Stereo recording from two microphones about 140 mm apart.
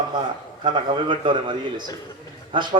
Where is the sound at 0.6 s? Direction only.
35° right (ahead or behind).